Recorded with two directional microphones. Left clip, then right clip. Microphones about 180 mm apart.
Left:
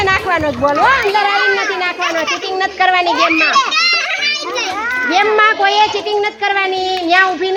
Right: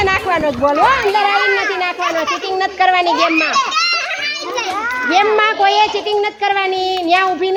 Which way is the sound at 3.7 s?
40° right (ahead or behind).